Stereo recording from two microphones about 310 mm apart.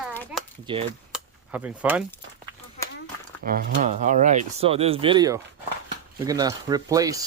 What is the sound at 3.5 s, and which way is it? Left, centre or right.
Speech, right.